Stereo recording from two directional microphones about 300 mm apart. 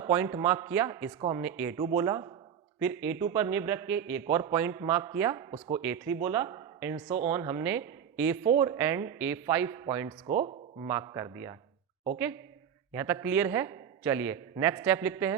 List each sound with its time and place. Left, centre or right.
0.0 s a man's voice: centre
12.9 s a man's voice: centre